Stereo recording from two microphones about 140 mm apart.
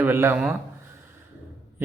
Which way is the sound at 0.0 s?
15° right (ahead or behind).